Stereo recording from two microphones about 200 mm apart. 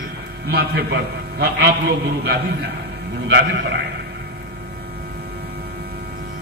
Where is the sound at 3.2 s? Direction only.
60° right (ahead or behind).